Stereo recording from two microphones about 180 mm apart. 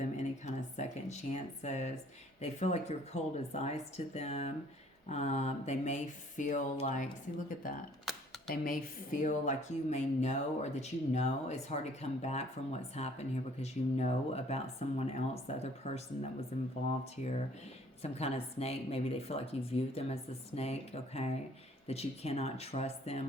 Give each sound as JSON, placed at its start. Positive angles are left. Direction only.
{"t": 0.2, "sound": "a sound", "side_deg": 40}
{"t": 2.4, "sound": "speech", "side_deg": 40}
{"t": 17.0, "sound": "speech", "side_deg": 35}